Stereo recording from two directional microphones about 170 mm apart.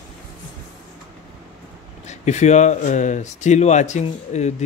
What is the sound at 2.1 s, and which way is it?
Speech, 40° left (ahead or behind).